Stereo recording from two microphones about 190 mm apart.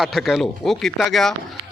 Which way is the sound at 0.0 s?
Centre (ahead or behind).